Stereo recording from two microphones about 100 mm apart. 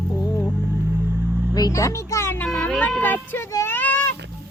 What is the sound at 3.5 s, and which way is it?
Speech, 35° left (ahead or behind).